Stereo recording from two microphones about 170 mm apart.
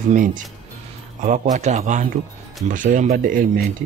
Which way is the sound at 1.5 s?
45° right (ahead or behind).